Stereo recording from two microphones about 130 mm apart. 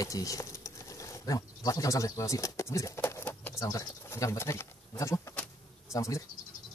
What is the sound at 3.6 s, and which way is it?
Speech, 20° left (ahead or behind).